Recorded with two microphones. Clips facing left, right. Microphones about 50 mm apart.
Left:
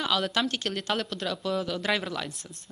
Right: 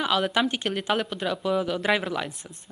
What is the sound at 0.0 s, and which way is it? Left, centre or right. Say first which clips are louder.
Speech: right 3 dB; centre.